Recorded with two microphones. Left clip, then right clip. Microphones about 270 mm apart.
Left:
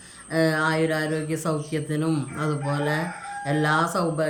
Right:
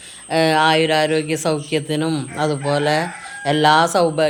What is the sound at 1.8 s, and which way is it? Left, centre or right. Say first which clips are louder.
Speech: right 5 dB; centre.